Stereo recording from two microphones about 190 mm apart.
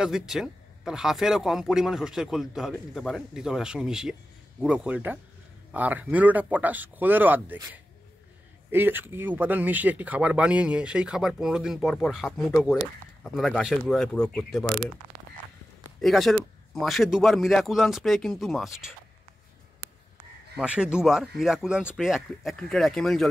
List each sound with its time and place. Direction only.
0.0 s speech: centre (ahead or behind)
16.0 s speech: centre (ahead or behind)
20.5 s speech: 5° right (ahead or behind)